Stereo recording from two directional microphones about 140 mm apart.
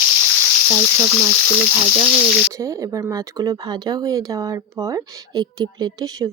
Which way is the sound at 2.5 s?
25° right (ahead or behind).